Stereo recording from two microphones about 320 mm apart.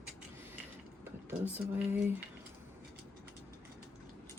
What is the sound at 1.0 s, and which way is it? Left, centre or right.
Speech, centre.